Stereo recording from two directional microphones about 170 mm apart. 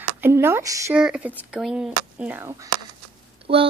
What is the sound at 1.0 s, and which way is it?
A woman's voice, 5° right (ahead or behind).